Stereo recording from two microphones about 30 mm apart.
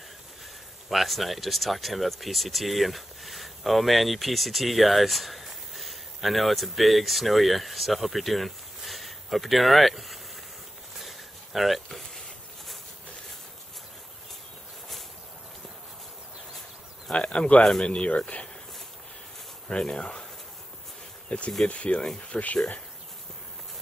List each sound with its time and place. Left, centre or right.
0.8 s speech: centre
11.0 s a sound: centre
17.1 s speech: left
19.7 s speech: left
21.3 s speech: left
22.3 s speech: left